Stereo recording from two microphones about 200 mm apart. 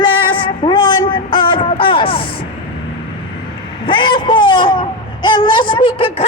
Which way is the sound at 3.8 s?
25° left (ahead or behind).